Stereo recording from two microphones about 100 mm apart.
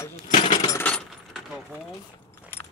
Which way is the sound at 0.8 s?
15° left (ahead or behind).